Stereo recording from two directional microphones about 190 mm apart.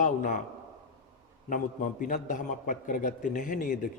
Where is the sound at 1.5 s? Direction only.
40° left (ahead or behind).